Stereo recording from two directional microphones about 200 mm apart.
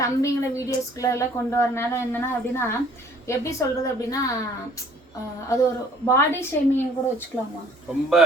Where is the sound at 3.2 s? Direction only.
15° left (ahead or behind).